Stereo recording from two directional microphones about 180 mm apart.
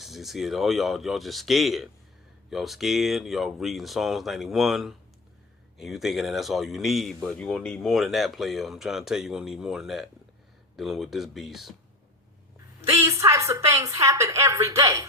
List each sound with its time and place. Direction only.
0.0 s speech: centre (ahead or behind)
13.0 s a woman's voice: 15° right (ahead or behind)